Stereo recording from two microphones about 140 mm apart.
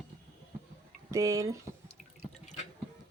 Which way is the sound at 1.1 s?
25° right (ahead or behind).